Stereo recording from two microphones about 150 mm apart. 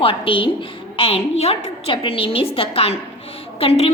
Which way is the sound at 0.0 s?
35° left (ahead or behind).